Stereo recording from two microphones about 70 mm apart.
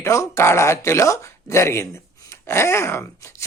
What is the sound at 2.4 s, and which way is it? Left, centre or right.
Groan, left.